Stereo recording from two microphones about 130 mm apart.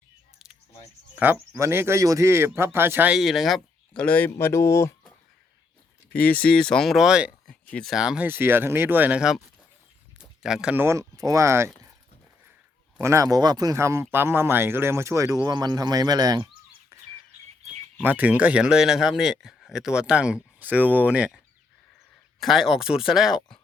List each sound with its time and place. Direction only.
1.1 s speech: 15° right (ahead or behind)
3.2 s speech: centre (ahead or behind); by 4.9 s 20° left (ahead or behind)
6.4 s speech: 5° left (ahead or behind)
7.4 s speech: 5° left (ahead or behind)
10.2 s a sound: 5° right (ahead or behind)
10.8 s speech: 25° right (ahead or behind)
13.0 s speech: 20° right (ahead or behind)
16.9 s chirp: 25° right (ahead or behind)
18.0 s speech: 10° right (ahead or behind)